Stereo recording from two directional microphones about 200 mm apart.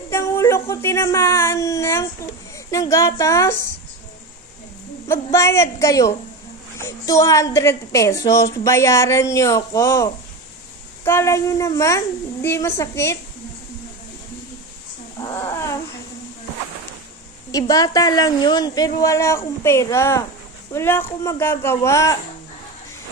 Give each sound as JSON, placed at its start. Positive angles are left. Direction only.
{"t": 0.1, "sound": "a woman's voice", "side_deg": 15}
{"t": 5.0, "sound": "a woman's voice", "side_deg": 15}
{"t": 15.1, "sound": "a sound", "side_deg": 20}
{"t": 17.5, "sound": "a woman's voice", "side_deg": 20}